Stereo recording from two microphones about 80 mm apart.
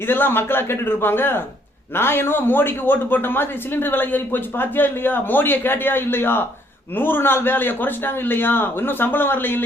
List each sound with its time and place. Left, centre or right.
0.1 s speech: left